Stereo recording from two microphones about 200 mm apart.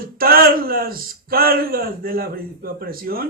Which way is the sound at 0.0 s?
45° right (ahead or behind).